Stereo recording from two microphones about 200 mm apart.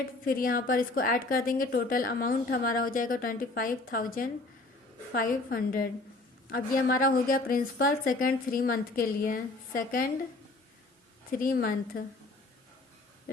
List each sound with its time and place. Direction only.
0.3 s a woman's voice: 45° left (ahead or behind)
11.3 s a woman's voice: 45° left (ahead or behind)